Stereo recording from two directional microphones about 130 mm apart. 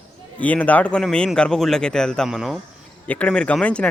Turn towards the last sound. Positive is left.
turn(degrees=10)  # may be behind; listen again after turning